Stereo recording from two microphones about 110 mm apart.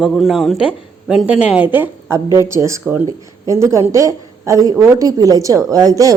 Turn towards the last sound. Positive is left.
turn(degrees=-30)  # may be behind; listen again after turning